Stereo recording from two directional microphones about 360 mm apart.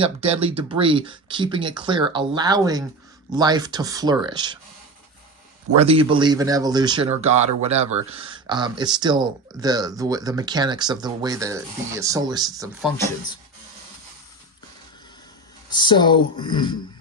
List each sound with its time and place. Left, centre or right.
0.0 s speech: centre
5.7 s speech: centre
15.7 s speech: centre